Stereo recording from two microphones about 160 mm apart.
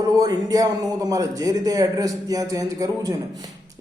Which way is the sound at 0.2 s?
20° right (ahead or behind).